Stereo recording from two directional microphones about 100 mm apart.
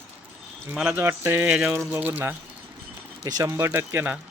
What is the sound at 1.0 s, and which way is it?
Mantra, 25° right (ahead or behind).